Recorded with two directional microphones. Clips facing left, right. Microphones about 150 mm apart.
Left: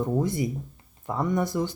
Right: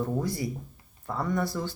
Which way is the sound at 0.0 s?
20° left (ahead or behind).